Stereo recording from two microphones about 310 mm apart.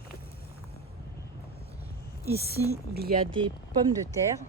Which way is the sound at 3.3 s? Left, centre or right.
Centre.